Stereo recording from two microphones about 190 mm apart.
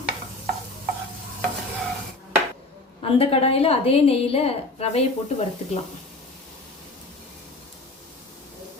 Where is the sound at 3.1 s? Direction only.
30° left (ahead or behind).